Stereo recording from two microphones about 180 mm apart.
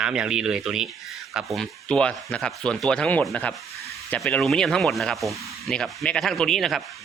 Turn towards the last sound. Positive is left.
turn(degrees=0)  # may be behind; listen again after turning